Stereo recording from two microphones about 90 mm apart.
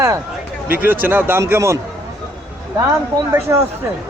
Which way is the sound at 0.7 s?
20° right (ahead or behind).